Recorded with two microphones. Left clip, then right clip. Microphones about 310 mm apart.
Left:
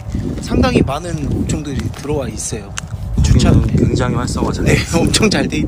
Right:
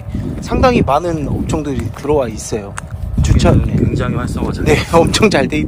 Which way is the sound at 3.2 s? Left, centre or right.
Centre.